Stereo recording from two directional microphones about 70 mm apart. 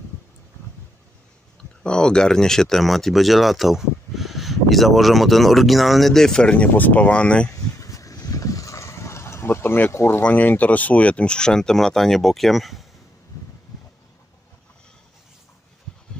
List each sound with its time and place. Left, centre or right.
1.8 s speech: centre
6.7 s speech: left
7.5 s vehicle: left
10.2 s speech: left; by 12.8 s centre